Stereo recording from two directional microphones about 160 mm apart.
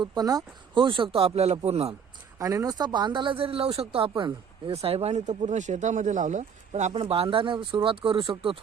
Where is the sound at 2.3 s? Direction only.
20° right (ahead or behind).